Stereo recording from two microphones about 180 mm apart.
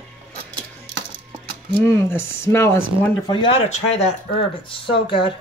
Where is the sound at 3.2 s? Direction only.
30° left (ahead or behind).